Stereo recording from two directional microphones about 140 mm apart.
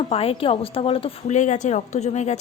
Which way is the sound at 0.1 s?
45° left (ahead or behind).